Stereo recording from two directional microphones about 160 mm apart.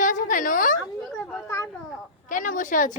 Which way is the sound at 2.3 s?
55° left (ahead or behind).